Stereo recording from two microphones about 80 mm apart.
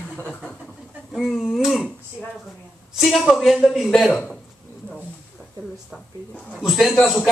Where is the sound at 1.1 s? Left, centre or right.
Centre.